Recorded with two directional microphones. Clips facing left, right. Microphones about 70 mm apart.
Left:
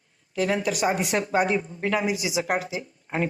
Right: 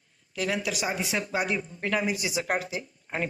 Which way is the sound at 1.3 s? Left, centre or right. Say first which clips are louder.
Left 7 dB; left.